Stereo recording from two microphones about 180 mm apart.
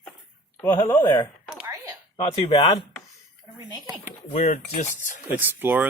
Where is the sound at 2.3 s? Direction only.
25° left (ahead or behind).